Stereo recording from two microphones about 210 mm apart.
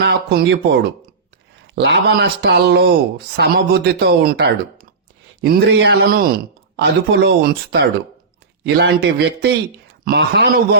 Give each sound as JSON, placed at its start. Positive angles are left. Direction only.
{"t": 0.0, "sound": "speech", "side_deg": -55}